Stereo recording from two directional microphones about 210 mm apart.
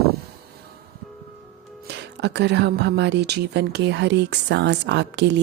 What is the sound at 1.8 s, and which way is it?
Speech, 55° right (ahead or behind).